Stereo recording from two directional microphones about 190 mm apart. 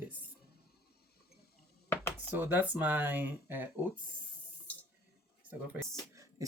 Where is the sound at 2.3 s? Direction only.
10° right (ahead or behind).